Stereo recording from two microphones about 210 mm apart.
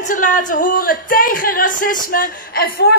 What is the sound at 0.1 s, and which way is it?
Speech, 40° left (ahead or behind).